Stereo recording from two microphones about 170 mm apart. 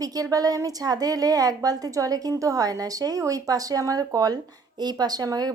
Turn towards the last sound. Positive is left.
turn(degrees=-20)  # may be behind; listen again after turning